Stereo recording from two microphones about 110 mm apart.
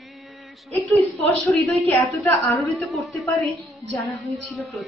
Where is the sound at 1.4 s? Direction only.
15° left (ahead or behind).